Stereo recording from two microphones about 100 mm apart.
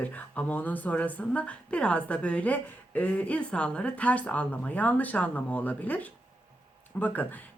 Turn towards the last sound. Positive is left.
turn(degrees=20)  # may be behind; listen again after turning